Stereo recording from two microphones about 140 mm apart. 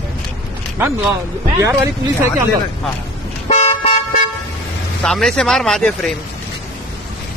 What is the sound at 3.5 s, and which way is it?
Car, 50° left (ahead or behind).